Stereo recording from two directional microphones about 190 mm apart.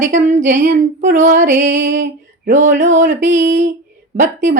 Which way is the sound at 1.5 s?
40° right (ahead or behind).